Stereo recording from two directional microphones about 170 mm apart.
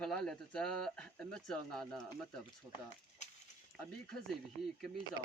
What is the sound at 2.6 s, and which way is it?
Speech, 20° right (ahead or behind).